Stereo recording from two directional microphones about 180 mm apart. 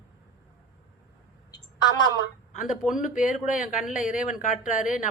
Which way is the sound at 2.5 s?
45° left (ahead or behind).